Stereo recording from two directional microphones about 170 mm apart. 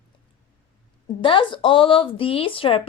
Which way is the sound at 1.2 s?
30° left (ahead or behind).